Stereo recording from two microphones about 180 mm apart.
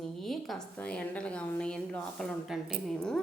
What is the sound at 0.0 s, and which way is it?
Speech, centre (ahead or behind).